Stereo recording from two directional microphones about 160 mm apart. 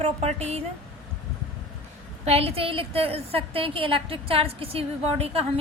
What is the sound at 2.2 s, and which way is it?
A woman's voice, 40° right (ahead or behind).